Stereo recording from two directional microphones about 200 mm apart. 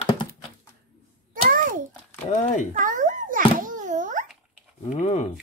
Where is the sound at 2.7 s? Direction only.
40° right (ahead or behind).